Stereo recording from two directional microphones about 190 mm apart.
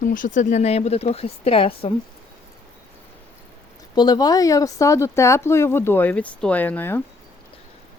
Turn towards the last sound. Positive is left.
turn(degrees=10)  # may be behind; listen again after turning